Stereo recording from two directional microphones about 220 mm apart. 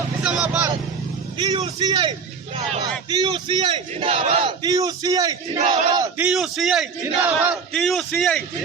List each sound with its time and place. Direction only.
0.2 s vehicle: 5° right (ahead or behind)
1.4 s a man's voice: 25° right (ahead or behind)
6.3 s speech: centre (ahead or behind)